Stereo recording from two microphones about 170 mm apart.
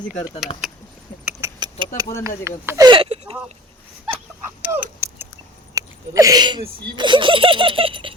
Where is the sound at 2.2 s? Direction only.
15° right (ahead or behind); by 3.4 s 35° right (ahead or behind).